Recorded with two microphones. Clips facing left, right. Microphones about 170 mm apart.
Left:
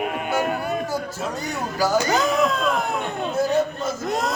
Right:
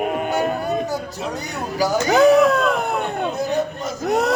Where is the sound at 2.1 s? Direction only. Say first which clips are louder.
Right 8 dB; 65° right (ahead or behind).